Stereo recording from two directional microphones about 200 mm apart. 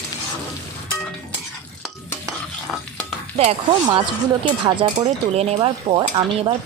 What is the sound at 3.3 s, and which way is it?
Speech, 30° right (ahead or behind).